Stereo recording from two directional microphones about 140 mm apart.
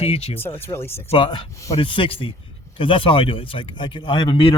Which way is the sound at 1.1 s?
40° left (ahead or behind).